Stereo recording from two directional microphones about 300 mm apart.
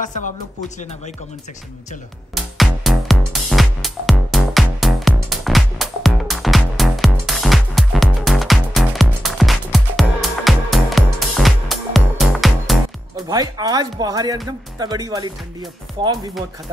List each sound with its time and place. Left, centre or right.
0.0 s speech: left
2.3 s music: centre
13.1 s speech: centre